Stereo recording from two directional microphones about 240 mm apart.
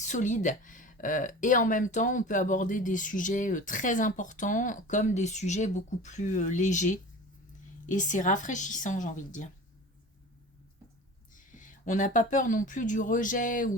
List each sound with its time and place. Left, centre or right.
0.1 s speech: left
11.3 s speech: left